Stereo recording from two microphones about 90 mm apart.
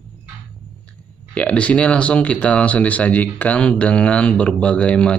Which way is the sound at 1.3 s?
15° left (ahead or behind).